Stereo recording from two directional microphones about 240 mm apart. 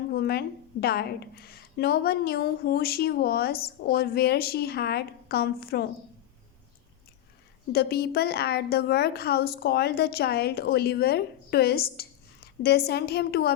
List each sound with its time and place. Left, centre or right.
0.1 s a woman's voice: left
7.7 s a woman's voice: left